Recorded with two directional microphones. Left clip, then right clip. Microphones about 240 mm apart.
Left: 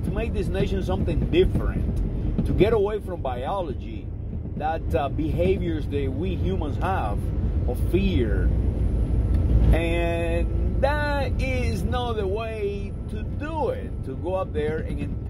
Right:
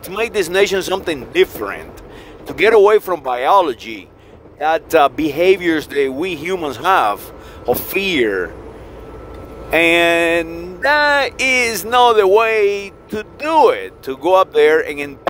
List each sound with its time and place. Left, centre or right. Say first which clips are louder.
0.2 s speech: right 14 dB; right
2.6 s speech: right 12 dB; right
9.7 s speech: right 14 dB; right